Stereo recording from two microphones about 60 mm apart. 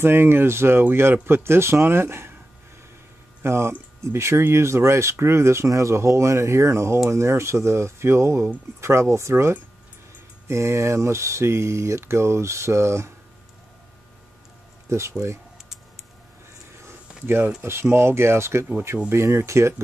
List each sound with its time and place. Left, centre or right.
0.0 s speech: right
3.4 s speech: right
14.9 s speech: right
17.6 s speech: right